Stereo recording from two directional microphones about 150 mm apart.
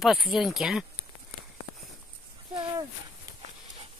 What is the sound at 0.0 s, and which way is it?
Speech, centre (ahead or behind).